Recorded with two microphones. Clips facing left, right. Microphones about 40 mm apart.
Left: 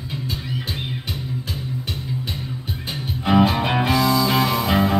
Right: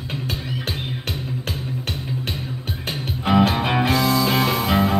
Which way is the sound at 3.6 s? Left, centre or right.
Centre.